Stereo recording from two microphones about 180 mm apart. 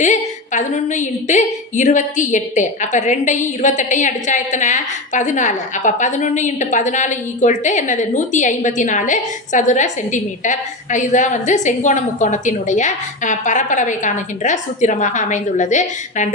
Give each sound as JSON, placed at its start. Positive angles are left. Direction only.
{"t": 0.0, "sound": "a woman's voice", "side_deg": 40}